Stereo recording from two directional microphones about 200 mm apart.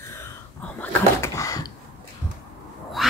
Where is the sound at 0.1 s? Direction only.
10° left (ahead or behind).